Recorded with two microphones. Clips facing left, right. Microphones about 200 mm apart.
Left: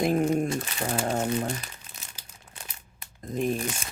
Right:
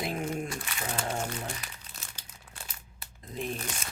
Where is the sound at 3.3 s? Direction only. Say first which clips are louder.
Left 8 dB; 45° left (ahead or behind).